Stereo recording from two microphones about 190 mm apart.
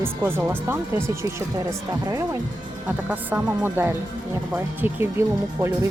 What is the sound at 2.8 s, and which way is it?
Speech, 10° right (ahead or behind).